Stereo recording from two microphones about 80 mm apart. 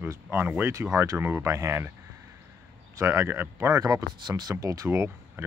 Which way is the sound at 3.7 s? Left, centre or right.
Right.